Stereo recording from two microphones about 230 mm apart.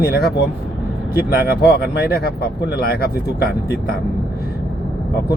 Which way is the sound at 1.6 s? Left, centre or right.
Left.